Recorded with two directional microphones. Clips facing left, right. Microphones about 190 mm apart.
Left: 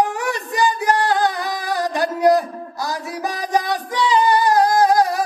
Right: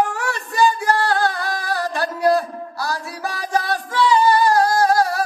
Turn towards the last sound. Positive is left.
turn(degrees=15)  # may be behind; listen again after turning